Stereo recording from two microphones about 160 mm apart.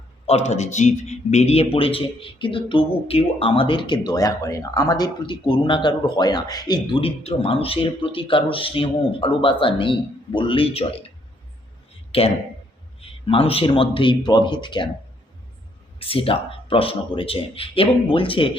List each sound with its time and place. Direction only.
0.3 s a man's voice: 40° left (ahead or behind)
12.1 s a man's voice: 35° left (ahead or behind)
16.0 s a man's voice: 35° left (ahead or behind)